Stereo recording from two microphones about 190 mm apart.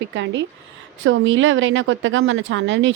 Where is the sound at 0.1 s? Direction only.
70° right (ahead or behind).